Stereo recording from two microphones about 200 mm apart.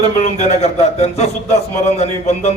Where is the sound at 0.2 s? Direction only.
35° left (ahead or behind).